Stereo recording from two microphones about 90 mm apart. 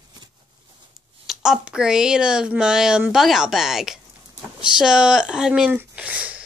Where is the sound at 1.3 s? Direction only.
5° right (ahead or behind).